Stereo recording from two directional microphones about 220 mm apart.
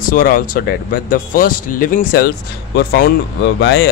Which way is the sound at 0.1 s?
40° left (ahead or behind).